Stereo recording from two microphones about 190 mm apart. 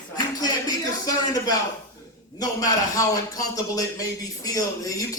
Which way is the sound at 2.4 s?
20° left (ahead or behind).